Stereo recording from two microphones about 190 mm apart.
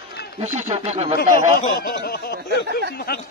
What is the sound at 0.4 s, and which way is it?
Speech, 35° right (ahead or behind).